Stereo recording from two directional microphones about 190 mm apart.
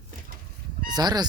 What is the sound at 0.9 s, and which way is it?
Speech, 20° right (ahead or behind).